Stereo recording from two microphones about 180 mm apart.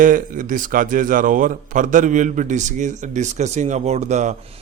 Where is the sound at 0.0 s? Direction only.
50° right (ahead or behind).